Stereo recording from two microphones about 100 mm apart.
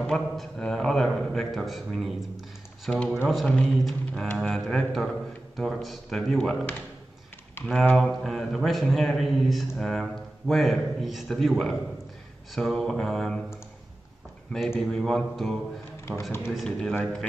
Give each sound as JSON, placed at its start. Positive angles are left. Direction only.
{"t": 0.0, "sound": "a man's voice", "side_deg": 5}
{"t": 7.6, "sound": "a man's voice", "side_deg": 5}
{"t": 14.8, "sound": "a man's voice", "side_deg": 5}
{"t": 16.1, "sound": "speech", "side_deg": 25}
{"t": 16.5, "sound": "a man's voice", "side_deg": 0}